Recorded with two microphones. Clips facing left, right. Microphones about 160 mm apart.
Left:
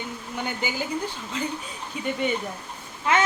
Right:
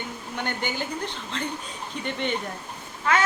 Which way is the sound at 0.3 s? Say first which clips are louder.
Even; 5° left (ahead or behind).